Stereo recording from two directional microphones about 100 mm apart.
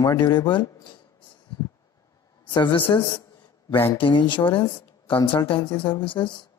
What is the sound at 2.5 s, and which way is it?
Speech, 55° left (ahead or behind).